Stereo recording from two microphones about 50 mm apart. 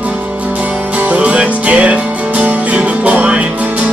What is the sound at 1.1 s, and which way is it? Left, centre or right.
Music, right.